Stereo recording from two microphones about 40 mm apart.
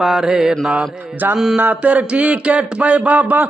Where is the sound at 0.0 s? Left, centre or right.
Centre.